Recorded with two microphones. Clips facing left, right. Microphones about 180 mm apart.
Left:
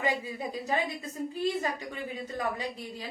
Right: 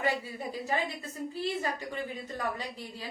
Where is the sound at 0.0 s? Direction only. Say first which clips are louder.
Left 1 dB; 15° left (ahead or behind).